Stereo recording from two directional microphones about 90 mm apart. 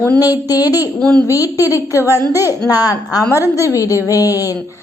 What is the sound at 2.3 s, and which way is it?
Speech, 30° right (ahead or behind).